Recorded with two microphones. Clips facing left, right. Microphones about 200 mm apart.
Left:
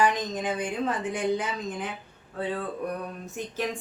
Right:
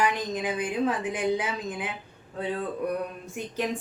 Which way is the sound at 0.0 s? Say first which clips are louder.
Left 1 dB; 10° right (ahead or behind).